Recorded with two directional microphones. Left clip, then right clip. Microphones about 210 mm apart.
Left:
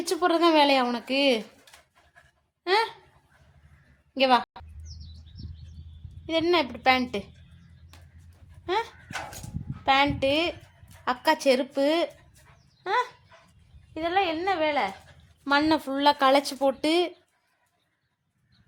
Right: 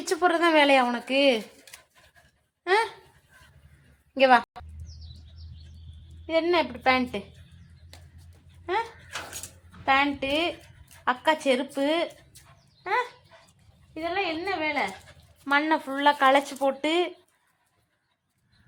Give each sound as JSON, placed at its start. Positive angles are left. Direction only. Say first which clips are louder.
{"t": 0.1, "sound": "speech", "louder": "even", "side_deg": 10}
{"t": 2.6, "sound": "speech", "louder": "even", "side_deg": 10}
{"t": 4.1, "sound": "a woman's voice", "louder": "right 3 dB", "side_deg": 0}
{"t": 4.9, "sound": "bird", "louder": "left 2 dB", "side_deg": 45}
{"t": 6.2, "sound": "speech", "louder": "even", "side_deg": 10}
{"t": 8.6, "sound": "a woman's voice", "louder": "even", "side_deg": 10}
{"t": 12.8, "sound": "dog", "louder": "left 1 dB", "side_deg": 5}
{"t": 13.9, "sound": "a woman's voice", "louder": "left 3 dB", "side_deg": 0}
{"t": 15.4, "sound": "speech", "louder": "left 1 dB", "side_deg": 20}